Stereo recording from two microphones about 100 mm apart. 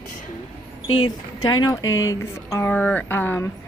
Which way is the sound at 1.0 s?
45° left (ahead or behind).